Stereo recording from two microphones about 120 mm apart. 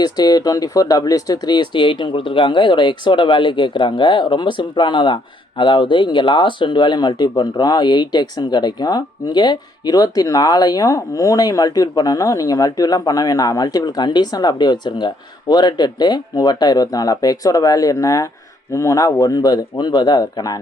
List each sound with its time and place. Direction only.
0.0 s speech: 35° left (ahead or behind)